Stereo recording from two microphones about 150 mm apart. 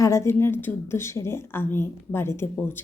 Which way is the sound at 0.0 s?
20° left (ahead or behind).